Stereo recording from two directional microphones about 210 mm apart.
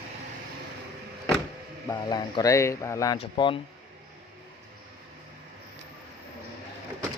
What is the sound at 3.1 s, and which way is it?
Speech, 25° left (ahead or behind).